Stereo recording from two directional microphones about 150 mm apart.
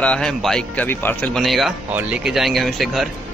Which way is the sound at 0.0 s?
5° left (ahead or behind).